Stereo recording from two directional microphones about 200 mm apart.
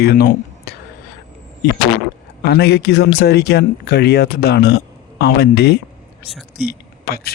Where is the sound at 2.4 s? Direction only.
55° left (ahead or behind).